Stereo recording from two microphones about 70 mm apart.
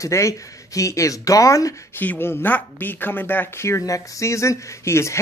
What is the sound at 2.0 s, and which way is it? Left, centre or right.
Speech, left.